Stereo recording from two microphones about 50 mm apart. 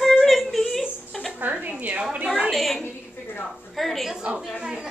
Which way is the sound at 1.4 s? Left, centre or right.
Right.